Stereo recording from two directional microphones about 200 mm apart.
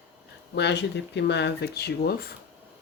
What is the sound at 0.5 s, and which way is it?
Speech, 60° left (ahead or behind).